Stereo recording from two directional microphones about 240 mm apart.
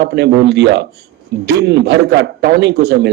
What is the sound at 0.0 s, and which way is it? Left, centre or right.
A man's voice, right.